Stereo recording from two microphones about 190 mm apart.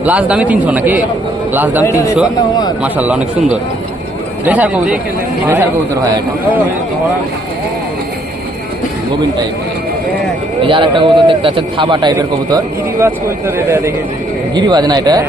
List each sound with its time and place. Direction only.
0.0 s a man's voice: 5° right (ahead or behind)
1.8 s speech: 15° left (ahead or behind)
2.8 s a man's voice: 5° right (ahead or behind)
10.6 s a man's voice: 25° right (ahead or behind)